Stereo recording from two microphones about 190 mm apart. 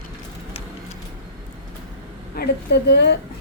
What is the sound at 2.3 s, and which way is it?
Speech, 60° left (ahead or behind).